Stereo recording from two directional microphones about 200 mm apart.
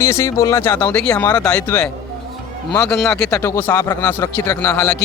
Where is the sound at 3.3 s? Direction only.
15° left (ahead or behind).